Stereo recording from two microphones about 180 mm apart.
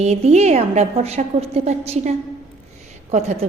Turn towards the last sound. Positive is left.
turn(degrees=-40)  # may be behind; listen again after turning